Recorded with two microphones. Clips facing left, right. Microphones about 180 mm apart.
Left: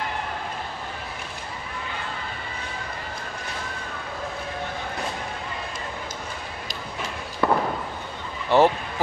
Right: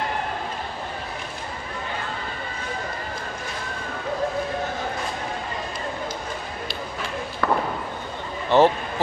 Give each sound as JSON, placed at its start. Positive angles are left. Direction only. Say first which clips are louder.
{"t": 7.4, "sound": "fireworks", "louder": "left 2 dB", "side_deg": 15}
{"t": 8.5, "sound": "speech", "louder": "right 1 dB", "side_deg": 10}